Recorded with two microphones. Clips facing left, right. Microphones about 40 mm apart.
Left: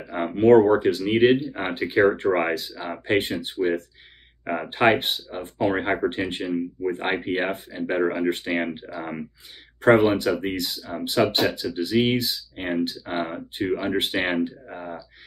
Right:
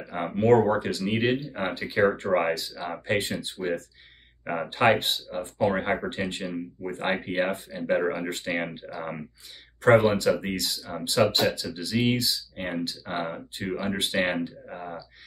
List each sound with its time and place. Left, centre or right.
0.1 s speech: centre
0.5 s speech: left
13.1 s speech: centre
13.8 s speech: left
14.7 s speech: centre